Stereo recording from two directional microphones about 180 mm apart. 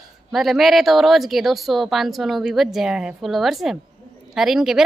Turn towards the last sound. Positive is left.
turn(degrees=0)  # may be behind; listen again after turning